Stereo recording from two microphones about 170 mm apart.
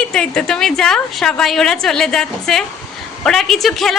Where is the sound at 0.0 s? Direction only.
5° left (ahead or behind).